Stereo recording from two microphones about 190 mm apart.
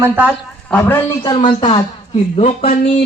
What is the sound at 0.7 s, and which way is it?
Speech, 10° left (ahead or behind).